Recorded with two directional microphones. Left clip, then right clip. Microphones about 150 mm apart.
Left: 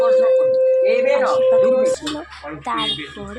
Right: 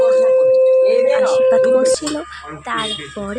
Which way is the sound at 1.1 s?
10° right (ahead or behind).